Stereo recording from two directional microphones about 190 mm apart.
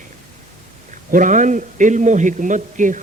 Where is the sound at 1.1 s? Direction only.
40° right (ahead or behind).